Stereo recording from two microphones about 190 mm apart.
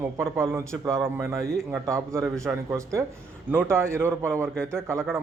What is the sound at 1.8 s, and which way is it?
A man's voice, 15° right (ahead or behind).